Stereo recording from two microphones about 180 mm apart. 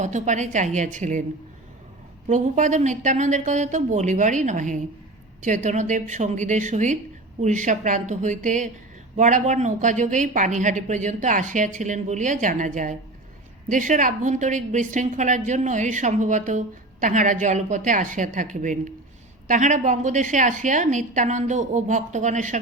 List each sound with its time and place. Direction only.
0.0 s a woman's voice: 40° right (ahead or behind)
2.2 s a woman's voice: 40° right (ahead or behind)